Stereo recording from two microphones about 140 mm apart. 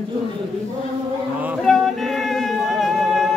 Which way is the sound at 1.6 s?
Centre (ahead or behind).